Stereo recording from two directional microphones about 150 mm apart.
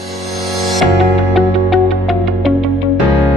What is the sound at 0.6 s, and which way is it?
Music, centre (ahead or behind).